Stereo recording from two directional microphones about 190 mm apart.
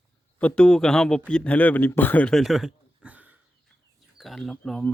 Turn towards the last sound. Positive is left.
turn(degrees=0)  # may be behind; listen again after turning